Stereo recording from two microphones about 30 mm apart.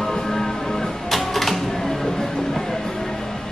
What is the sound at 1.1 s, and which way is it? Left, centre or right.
Typewriter, centre.